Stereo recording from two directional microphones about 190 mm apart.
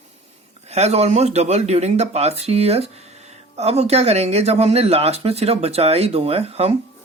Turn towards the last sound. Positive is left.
turn(degrees=-30)  # may be behind; listen again after turning